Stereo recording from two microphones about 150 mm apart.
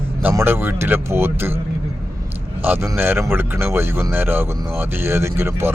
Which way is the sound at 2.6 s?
10° right (ahead or behind).